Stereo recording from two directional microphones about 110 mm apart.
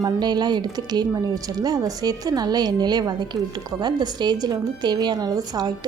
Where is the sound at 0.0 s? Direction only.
40° right (ahead or behind).